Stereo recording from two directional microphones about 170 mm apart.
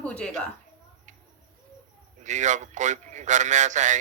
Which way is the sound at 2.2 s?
45° right (ahead or behind).